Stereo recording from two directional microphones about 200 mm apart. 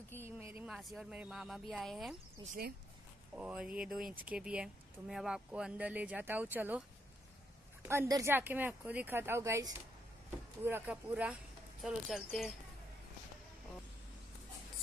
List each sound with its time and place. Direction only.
0.2 s speech: 10° right (ahead or behind)
3.3 s speech: 5° right (ahead or behind)
7.8 s speech: 10° right (ahead or behind)